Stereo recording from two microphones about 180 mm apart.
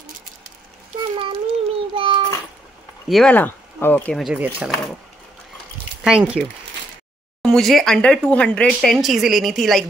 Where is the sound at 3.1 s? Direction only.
5° left (ahead or behind).